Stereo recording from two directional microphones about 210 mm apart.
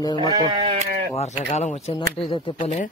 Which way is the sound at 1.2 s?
30° left (ahead or behind).